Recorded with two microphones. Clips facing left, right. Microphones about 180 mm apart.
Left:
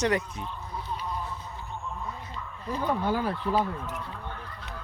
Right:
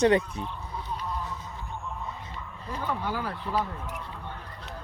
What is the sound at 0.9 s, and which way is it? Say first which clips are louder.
Duck: even; centre (ahead or behind).